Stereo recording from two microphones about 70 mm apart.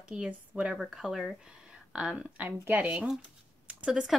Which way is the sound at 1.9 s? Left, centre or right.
Centre.